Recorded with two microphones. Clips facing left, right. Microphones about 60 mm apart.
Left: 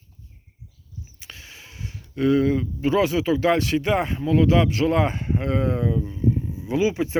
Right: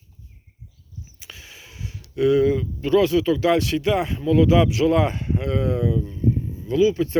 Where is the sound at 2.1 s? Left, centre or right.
Centre.